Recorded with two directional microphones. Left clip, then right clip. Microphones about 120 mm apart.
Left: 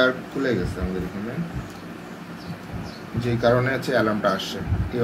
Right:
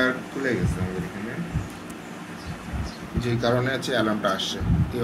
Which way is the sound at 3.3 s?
20° left (ahead or behind).